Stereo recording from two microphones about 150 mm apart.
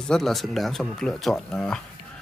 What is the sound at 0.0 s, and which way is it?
Speech, centre (ahead or behind).